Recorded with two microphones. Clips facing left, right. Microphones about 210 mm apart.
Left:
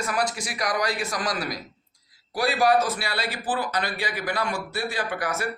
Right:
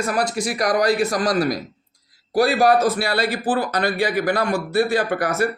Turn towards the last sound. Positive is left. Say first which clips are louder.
# right 7 dB
turn(degrees=-40)  # may be behind; listen again after turning